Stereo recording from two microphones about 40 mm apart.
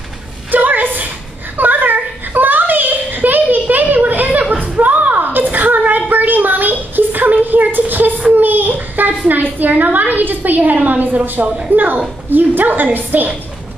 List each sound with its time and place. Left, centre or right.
0.5 s a sound: right
8.2 s child singing: right
9.3 s a woman's voice: right
11.4 s speech: right
11.7 s a woman's voice: right